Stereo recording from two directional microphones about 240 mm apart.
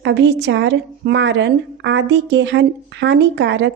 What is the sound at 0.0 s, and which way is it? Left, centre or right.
A woman's voice, right.